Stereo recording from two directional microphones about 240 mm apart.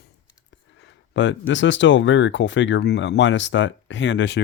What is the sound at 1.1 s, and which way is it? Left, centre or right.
Speech, left.